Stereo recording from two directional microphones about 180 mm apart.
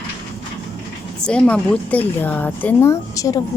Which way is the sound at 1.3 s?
5° left (ahead or behind).